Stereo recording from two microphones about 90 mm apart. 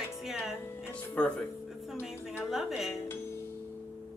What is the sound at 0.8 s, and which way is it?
Speech, 25° left (ahead or behind).